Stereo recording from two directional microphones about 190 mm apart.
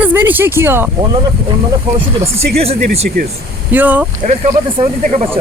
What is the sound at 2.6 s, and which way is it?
Speech, 35° right (ahead or behind).